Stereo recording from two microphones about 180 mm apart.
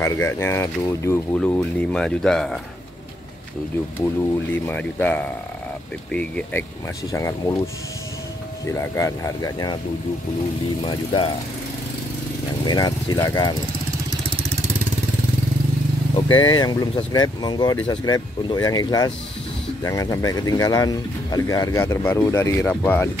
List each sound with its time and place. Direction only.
0.0 s speech: 15° left (ahead or behind)
4.5 s speech: 10° left (ahead or behind)
7.1 s speech: 20° left (ahead or behind)
8.7 s speech: 15° left (ahead or behind)
10.9 s speech: 30° left (ahead or behind)
12.6 s speech: 20° left (ahead or behind)
16.3 s speech: 25° left (ahead or behind)